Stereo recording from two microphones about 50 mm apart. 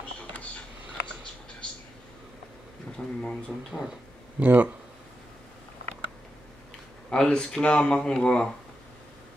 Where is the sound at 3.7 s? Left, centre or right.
Left.